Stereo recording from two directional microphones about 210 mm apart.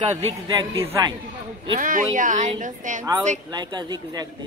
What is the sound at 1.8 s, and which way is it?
A woman's voice, 40° right (ahead or behind).